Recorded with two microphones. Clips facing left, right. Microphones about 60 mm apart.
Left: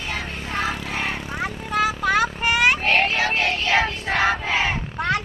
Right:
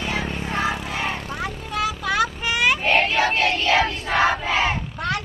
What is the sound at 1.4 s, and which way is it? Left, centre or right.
Vehicle, left.